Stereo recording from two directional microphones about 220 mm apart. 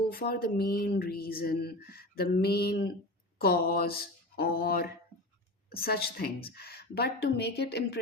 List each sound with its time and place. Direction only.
0.1 s speech: 45° left (ahead or behind)
3.3 s mantra: 45° left (ahead or behind)
5.7 s speech: 45° left (ahead or behind)